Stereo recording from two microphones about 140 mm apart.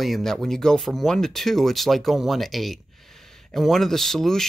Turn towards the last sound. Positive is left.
turn(degrees=5)  # may be behind; listen again after turning